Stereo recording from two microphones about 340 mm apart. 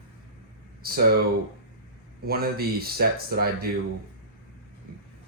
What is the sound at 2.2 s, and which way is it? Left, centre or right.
Speech, right.